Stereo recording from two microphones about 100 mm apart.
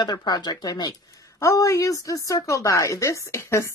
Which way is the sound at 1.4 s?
30° left (ahead or behind).